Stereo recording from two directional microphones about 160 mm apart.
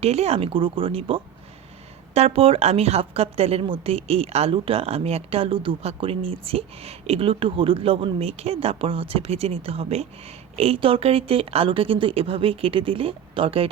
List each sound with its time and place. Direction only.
0.0 s a woman's voice: 40° right (ahead or behind)